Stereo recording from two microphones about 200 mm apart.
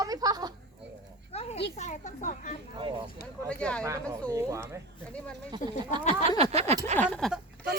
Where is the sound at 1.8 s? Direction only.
35° left (ahead or behind).